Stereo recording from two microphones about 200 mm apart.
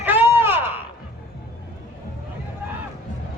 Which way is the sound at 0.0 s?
10° right (ahead or behind).